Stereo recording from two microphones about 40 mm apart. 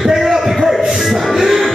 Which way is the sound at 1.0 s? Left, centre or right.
Centre.